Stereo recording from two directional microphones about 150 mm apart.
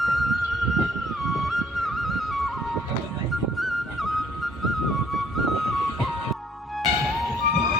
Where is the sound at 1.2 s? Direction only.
Centre (ahead or behind).